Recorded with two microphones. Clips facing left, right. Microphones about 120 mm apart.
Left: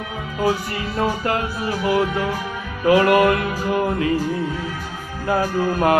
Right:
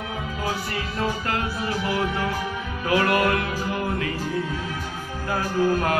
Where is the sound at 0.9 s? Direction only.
15° left (ahead or behind).